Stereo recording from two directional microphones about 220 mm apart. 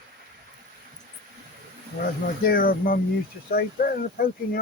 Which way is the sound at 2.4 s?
40° left (ahead or behind).